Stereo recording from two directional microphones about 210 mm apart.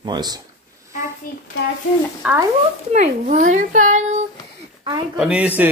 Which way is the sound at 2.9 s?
35° right (ahead or behind).